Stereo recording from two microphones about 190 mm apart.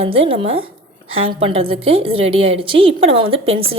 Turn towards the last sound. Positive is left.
turn(degrees=-30)  # may be behind; listen again after turning